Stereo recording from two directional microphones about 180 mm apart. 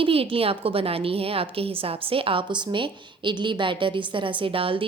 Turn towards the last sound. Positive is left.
turn(degrees=-30)  # may be behind; listen again after turning